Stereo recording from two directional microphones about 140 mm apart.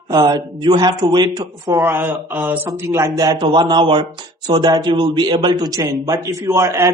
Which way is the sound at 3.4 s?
35° right (ahead or behind).